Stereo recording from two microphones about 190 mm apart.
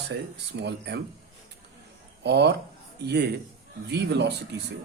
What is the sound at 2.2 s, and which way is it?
Speech, 65° right (ahead or behind).